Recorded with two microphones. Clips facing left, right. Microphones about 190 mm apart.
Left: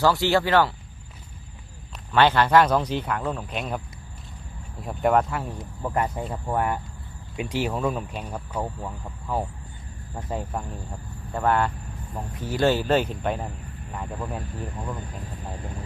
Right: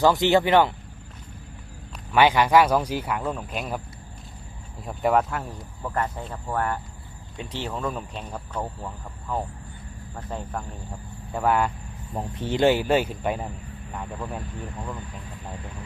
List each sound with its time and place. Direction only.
0.0 s speech: 20° right (ahead or behind)
2.1 s speech: 10° right (ahead or behind)
4.8 s speech: centre (ahead or behind)
5.5 s speech: 15° left (ahead or behind)
10.5 s speech: 5° left (ahead or behind)
11.3 s speech: 5° right (ahead or behind)
12.1 s speech: 25° right (ahead or behind); by 14.4 s centre (ahead or behind)